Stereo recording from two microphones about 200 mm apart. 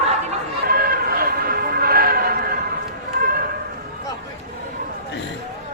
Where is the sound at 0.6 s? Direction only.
50° right (ahead or behind).